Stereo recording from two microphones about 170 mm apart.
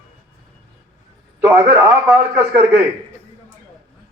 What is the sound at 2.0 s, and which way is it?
Speech, 5° right (ahead or behind).